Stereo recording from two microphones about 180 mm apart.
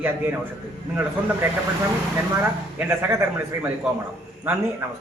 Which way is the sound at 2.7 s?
15° right (ahead or behind).